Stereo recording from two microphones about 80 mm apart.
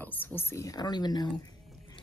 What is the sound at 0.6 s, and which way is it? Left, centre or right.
Speech, left.